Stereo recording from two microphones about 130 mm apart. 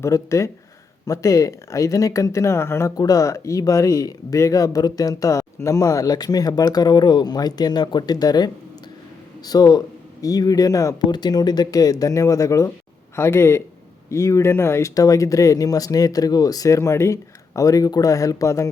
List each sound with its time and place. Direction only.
0.0 s speech: 25° left (ahead or behind)
9.5 s speech: 30° left (ahead or behind)